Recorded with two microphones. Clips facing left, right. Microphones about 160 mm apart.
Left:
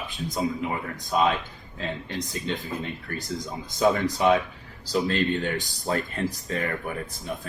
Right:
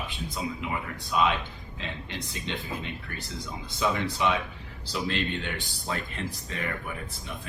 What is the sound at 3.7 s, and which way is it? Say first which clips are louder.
Speech: left 6 dB; 40° left (ahead or behind).